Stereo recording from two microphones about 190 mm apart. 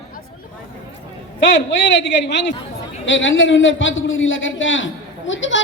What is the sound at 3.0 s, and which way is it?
A man's voice, 80° left.